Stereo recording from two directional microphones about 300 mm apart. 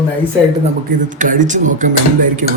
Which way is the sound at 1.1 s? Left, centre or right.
Right.